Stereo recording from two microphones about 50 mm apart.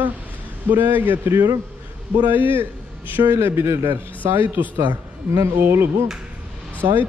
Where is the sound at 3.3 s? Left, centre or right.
Right.